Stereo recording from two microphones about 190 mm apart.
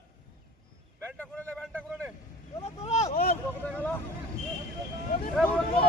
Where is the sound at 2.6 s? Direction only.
35° left (ahead or behind).